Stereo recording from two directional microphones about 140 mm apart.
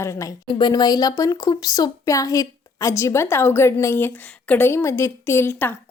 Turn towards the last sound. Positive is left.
turn(degrees=15)  # may be behind; listen again after turning